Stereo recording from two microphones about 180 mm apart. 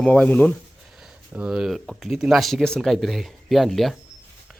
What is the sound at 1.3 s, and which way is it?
Speech, 5° right (ahead or behind).